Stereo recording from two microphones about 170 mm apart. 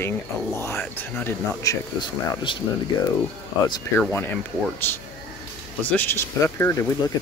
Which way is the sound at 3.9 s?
10° left (ahead or behind).